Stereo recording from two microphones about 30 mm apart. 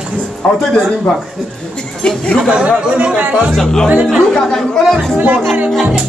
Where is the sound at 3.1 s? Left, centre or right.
Right.